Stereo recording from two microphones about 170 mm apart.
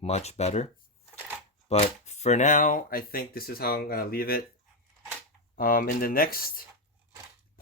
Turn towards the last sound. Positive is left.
turn(degrees=60)  # may be behind; listen again after turning